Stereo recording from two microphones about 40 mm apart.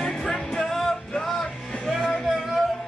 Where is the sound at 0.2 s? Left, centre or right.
Centre.